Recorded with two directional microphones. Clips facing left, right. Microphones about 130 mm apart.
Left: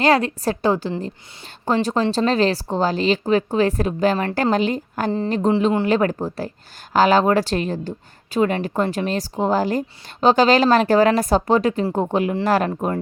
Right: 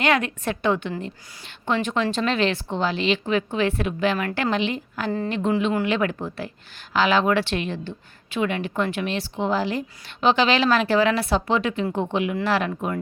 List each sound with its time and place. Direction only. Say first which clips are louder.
0.0 s a woman's voice: left 5 dB; 35° left (ahead or behind)
4.5 s a woman's voice: left 5 dB; 40° left (ahead or behind)